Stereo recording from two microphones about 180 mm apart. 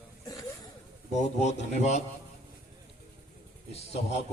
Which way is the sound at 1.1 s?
40° left (ahead or behind).